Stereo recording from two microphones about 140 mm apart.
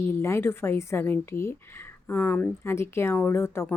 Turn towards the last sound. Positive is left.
turn(degrees=15)  # may be behind; listen again after turning